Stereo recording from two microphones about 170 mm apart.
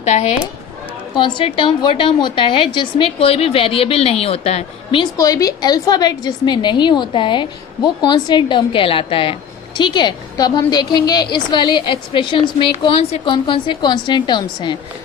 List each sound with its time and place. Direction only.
0.0 s speech: 45° left (ahead or behind)
1.1 s a woman's voice: 30° left (ahead or behind)
5.1 s a woman's voice: 20° left (ahead or behind)